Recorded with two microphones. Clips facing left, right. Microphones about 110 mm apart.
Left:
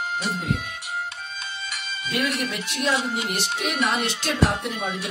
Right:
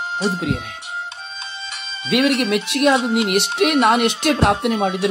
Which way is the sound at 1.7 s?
25° right (ahead or behind).